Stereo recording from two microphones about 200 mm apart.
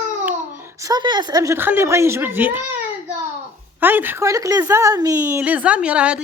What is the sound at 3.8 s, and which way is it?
Speech, 10° right (ahead or behind).